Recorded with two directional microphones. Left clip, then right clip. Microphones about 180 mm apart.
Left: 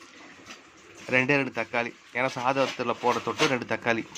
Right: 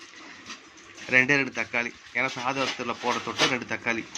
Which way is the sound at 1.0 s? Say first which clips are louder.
Right 2 dB; 10° left (ahead or behind).